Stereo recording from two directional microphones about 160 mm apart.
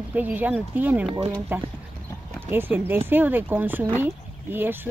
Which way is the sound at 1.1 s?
45° right (ahead or behind).